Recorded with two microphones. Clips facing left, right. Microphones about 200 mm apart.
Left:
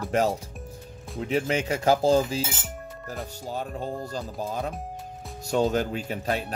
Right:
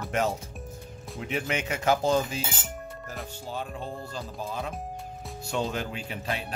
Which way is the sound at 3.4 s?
40° left (ahead or behind).